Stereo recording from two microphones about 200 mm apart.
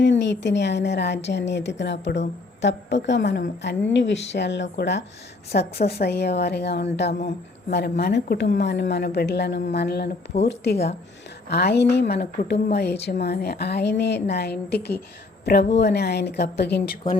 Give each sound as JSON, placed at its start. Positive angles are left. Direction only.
{"t": 0.0, "sound": "a woman's voice", "side_deg": 60}